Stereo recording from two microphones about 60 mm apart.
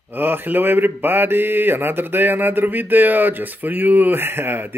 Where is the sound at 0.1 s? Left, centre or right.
Right.